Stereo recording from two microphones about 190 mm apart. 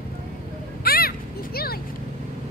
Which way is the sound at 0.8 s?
50° left (ahead or behind).